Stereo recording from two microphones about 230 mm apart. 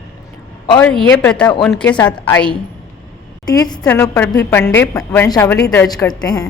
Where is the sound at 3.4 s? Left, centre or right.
Centre.